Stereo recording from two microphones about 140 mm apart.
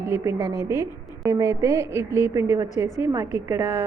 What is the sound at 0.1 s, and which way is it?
A woman's voice, 20° right (ahead or behind).